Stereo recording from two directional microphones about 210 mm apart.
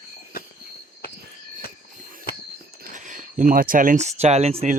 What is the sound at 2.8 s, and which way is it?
Speech, 35° right (ahead or behind).